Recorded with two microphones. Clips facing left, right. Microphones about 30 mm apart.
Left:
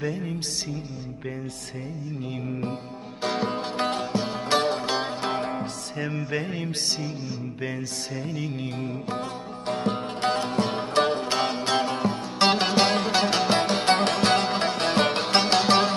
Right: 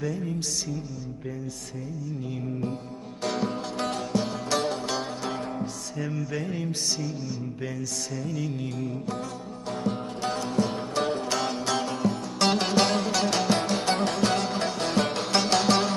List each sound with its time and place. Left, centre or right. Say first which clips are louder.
0.0 s music: left 1 dB; left
3.2 s music: left 2 dB; left
4.4 s music: left 4 dB; left
6.1 s music: left 2 dB; left
8.3 s music: even; left
9.6 s music: left 3 dB; left
11.3 s music: left 3 dB; left